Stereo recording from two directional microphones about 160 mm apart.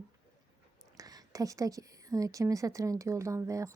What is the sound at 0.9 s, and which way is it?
A woman's voice, 20° right (ahead or behind).